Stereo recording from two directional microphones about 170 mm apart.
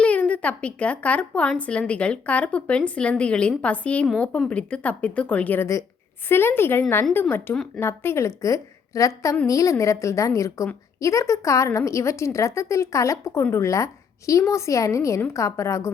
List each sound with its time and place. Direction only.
0.0 s a woman's voice: 5° left (ahead or behind)